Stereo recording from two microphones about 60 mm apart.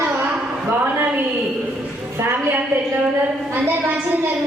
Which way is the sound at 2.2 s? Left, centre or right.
Right.